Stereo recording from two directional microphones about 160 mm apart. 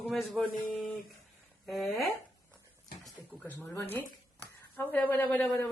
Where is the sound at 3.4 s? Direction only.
10° left (ahead or behind).